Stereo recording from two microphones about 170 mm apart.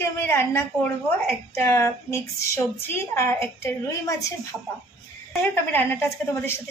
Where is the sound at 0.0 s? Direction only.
15° left (ahead or behind).